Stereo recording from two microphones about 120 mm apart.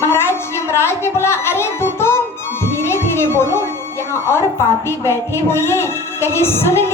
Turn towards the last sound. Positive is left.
turn(degrees=20)  # may be behind; listen again after turning